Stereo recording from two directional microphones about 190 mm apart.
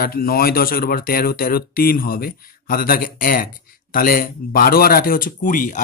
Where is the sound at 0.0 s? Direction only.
50° left (ahead or behind).